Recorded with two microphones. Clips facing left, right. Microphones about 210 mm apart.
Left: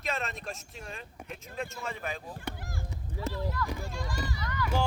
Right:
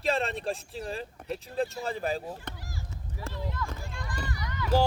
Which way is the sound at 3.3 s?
20° right (ahead or behind).